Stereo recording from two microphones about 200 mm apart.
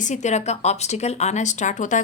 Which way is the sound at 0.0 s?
35° left (ahead or behind).